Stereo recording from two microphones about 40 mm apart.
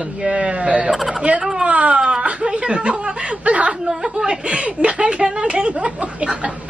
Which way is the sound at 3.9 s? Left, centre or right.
Centre.